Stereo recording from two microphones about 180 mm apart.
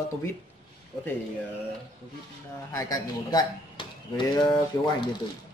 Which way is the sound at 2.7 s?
20° left (ahead or behind).